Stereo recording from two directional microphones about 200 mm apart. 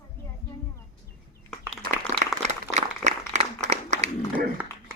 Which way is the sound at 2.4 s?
35° right (ahead or behind).